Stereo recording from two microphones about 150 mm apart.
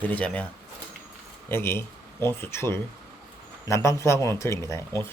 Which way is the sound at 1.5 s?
15° left (ahead or behind).